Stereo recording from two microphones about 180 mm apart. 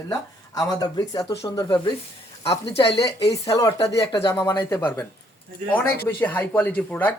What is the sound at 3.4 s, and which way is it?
Speech, 20° left (ahead or behind).